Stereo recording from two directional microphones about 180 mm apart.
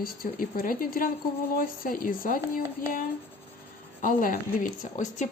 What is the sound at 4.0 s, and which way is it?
Speech, 50° left (ahead or behind).